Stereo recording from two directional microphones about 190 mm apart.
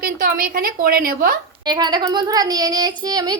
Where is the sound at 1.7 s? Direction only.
25° right (ahead or behind).